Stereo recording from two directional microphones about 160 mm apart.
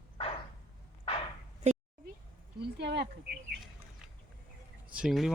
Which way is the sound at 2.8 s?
90° right.